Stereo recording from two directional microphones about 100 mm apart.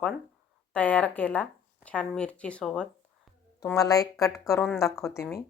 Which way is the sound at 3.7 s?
35° left (ahead or behind).